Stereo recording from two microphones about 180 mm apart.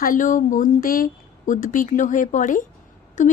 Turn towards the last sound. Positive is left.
turn(degrees=45)  # may be behind; listen again after turning